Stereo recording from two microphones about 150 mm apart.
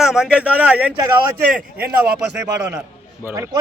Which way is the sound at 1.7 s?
90° right.